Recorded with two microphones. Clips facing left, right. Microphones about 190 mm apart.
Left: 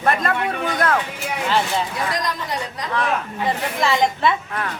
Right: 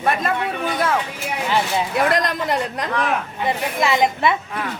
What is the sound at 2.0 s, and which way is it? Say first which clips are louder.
Speech: right 5 dB; 60° right (ahead or behind).